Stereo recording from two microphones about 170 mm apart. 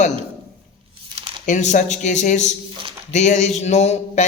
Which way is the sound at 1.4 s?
45° left (ahead or behind).